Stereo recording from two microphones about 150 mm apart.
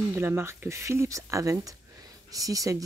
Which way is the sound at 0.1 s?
15° right (ahead or behind).